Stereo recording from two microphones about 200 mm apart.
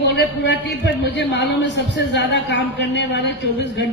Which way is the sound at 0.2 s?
60° left (ahead or behind).